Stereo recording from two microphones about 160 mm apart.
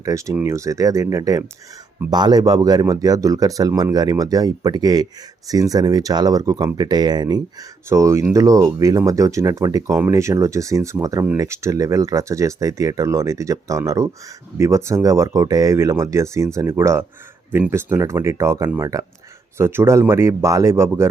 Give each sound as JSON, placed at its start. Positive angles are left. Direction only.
{"t": 0.0, "sound": "speech", "side_deg": -20}